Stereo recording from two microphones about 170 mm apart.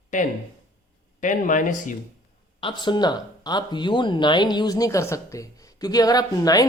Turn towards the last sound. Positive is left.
turn(degrees=20)  # may be behind; listen again after turning